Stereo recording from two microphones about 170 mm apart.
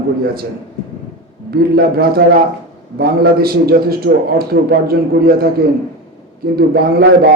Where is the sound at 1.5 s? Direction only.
65° right (ahead or behind).